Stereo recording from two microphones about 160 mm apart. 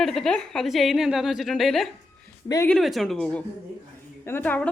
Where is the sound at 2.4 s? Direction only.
20° left (ahead or behind).